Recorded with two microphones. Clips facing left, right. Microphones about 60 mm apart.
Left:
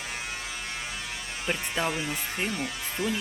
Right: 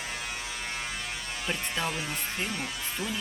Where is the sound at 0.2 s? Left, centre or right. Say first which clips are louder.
Left 1 dB; centre.